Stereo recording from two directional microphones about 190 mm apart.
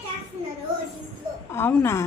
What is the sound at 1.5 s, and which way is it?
Speech, 10° left (ahead or behind).